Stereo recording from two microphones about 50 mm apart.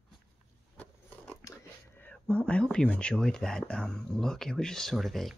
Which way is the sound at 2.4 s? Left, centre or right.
Centre.